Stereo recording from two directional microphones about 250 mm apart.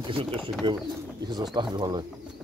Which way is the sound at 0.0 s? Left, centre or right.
Right.